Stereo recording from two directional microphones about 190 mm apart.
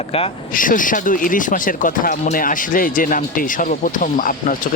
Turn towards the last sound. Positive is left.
turn(degrees=45)  # may be behind; listen again after turning